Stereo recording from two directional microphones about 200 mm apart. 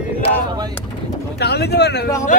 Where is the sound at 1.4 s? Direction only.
55° left (ahead or behind).